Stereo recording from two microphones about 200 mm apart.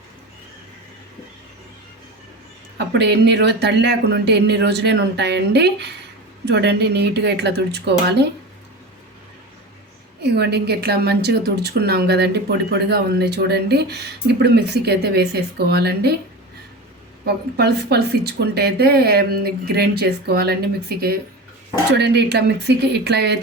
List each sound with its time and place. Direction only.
2.7 s a woman's voice: 55° right (ahead or behind)
10.2 s a woman's voice: 55° right (ahead or behind)
17.2 s a woman's voice: 55° right (ahead or behind)